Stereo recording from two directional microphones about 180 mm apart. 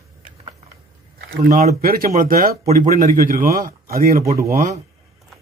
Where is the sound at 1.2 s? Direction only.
50° right (ahead or behind).